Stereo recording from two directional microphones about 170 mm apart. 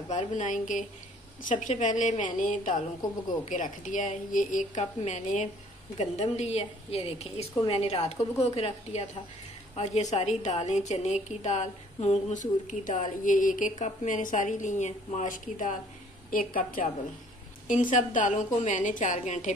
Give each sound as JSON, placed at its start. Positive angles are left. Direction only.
{"t": 0.1, "sound": "a woman's voice", "side_deg": 45}